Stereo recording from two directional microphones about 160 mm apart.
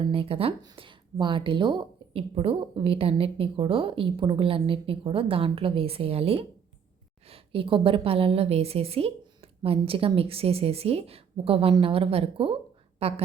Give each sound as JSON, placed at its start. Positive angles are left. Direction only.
{"t": 0.0, "sound": "a woman's voice", "side_deg": -35}